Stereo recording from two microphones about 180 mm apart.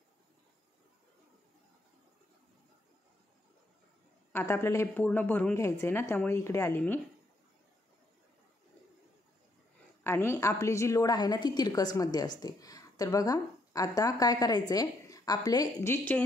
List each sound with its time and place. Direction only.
4.3 s a woman's voice: 15° left (ahead or behind)
10.0 s a woman's voice: 15° left (ahead or behind)